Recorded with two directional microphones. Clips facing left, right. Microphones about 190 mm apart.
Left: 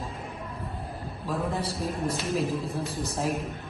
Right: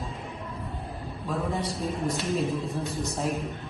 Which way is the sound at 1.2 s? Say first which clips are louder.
Even; centre (ahead or behind).